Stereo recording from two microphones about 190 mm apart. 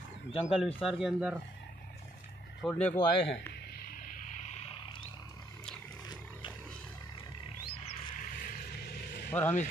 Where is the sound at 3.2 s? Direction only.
65° left (ahead or behind).